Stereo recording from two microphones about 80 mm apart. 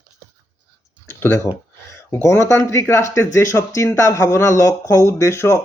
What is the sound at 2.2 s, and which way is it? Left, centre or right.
Speech, left.